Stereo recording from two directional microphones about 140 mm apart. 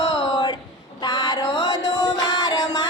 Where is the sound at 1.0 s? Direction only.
30° left (ahead or behind).